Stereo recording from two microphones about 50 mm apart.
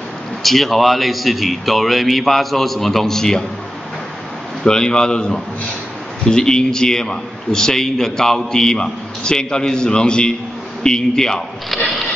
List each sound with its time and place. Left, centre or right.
0.4 s a man's voice: centre
4.6 s a man's voice: centre
11.7 s printer: centre